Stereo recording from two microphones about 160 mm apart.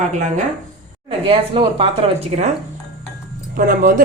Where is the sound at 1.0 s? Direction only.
35° right (ahead or behind).